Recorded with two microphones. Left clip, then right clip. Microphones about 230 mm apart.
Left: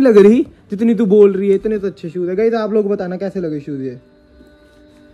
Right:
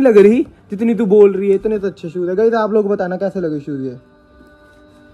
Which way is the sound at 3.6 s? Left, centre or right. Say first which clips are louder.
Even; centre.